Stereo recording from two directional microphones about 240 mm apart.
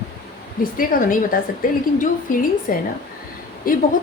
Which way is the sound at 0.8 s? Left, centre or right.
Left.